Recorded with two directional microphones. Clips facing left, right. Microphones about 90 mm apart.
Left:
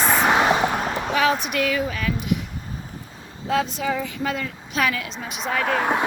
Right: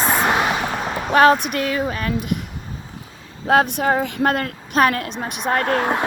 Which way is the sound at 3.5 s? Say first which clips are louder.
Right 6 dB; 65° right (ahead or behind).